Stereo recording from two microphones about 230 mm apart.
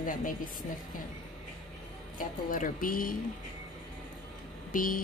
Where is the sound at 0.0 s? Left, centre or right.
Left.